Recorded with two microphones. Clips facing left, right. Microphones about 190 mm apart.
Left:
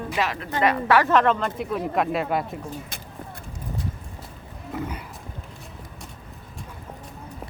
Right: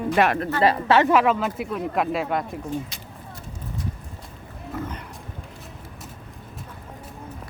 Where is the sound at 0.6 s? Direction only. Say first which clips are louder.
Right 1 dB; 30° right (ahead or behind).